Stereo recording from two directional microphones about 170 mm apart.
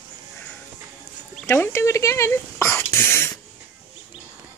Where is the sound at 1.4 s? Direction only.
15° left (ahead or behind).